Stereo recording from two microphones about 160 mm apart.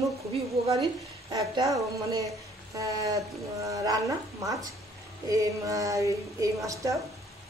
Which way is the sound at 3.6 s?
20° right (ahead or behind).